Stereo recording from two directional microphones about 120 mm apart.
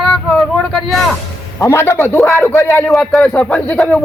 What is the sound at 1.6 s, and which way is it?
A man's voice, 25° left (ahead or behind).